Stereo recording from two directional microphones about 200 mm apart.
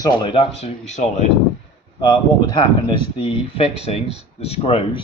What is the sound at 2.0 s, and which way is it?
Speech, 20° left (ahead or behind).